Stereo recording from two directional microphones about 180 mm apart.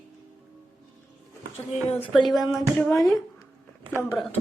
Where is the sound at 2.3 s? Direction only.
Centre (ahead or behind).